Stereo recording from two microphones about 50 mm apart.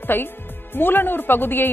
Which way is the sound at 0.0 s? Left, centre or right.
Left.